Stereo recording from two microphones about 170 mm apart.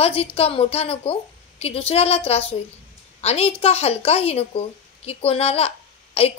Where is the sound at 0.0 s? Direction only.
35° left (ahead or behind).